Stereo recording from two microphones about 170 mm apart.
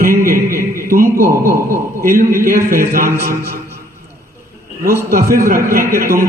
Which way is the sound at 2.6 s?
55° right (ahead or behind).